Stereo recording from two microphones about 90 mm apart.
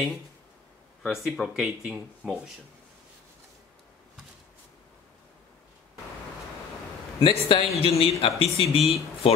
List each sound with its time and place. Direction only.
1.0 s speech: 5° right (ahead or behind)
7.2 s speech: 75° left (ahead or behind)